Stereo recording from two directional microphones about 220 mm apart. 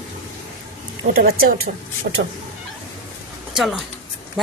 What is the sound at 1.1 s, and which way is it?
Speech, 45° right (ahead or behind).